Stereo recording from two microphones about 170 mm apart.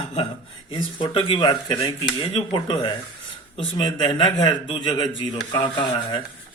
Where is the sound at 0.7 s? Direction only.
30° left (ahead or behind).